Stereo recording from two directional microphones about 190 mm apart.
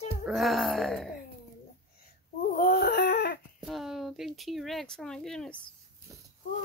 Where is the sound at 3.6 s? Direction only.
Centre (ahead or behind).